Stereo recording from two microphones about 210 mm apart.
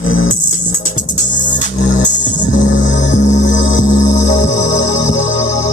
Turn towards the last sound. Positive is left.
turn(degrees=35)  # may be behind; listen again after turning